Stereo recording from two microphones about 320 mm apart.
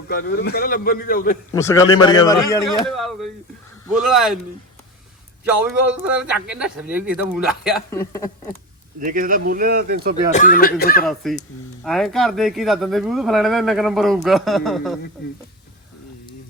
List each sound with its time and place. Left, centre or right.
0.1 s a man's voice: left
1.5 s a man's voice: centre
5.5 s speech: centre
9.0 s speech: right
10.3 s a man's voice: left
11.0 s speech: centre